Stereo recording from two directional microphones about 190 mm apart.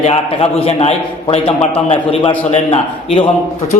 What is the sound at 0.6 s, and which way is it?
A man's voice, 35° left (ahead or behind).